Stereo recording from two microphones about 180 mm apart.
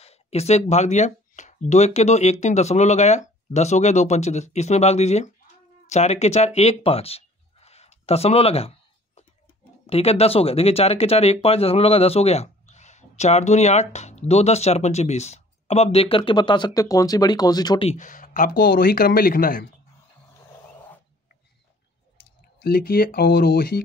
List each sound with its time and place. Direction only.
0.0 s speech: 35° left (ahead or behind)
5.9 s a sound: 40° left (ahead or behind)
9.8 s speech: 35° left (ahead or behind)
17.8 s speech: 45° left (ahead or behind)
22.6 s speech: 55° left (ahead or behind)